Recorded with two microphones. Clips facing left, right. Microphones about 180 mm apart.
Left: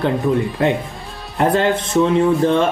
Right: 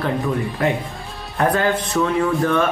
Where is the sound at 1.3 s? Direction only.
25° left (ahead or behind).